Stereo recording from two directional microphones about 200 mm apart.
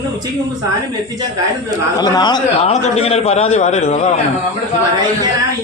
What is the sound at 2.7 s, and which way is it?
A man's voice, 35° left (ahead or behind).